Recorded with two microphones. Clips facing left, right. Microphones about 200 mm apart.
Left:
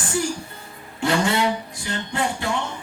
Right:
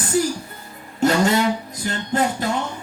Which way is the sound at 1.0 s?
40° right (ahead or behind).